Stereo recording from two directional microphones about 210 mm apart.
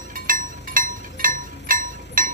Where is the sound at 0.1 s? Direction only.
40° right (ahead or behind).